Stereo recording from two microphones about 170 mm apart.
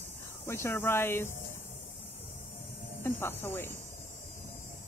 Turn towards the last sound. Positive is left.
turn(degrees=15)  # may be behind; listen again after turning